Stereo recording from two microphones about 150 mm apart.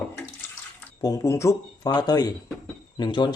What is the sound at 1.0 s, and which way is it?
Speech, 20° left (ahead or behind).